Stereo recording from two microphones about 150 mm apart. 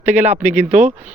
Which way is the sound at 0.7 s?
50° right (ahead or behind).